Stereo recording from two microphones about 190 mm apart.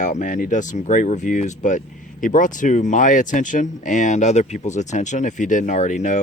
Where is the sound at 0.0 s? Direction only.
40° left (ahead or behind).